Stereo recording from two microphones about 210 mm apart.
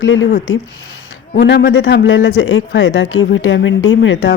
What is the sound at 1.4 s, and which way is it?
Speech, 55° left (ahead or behind).